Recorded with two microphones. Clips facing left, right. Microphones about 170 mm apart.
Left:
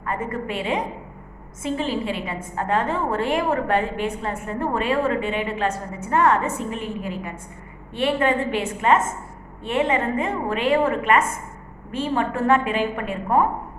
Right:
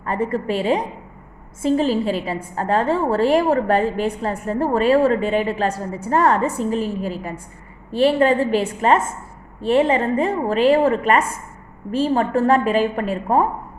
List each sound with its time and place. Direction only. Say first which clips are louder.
0.0 s a woman's voice: right 5 dB; 30° right (ahead or behind)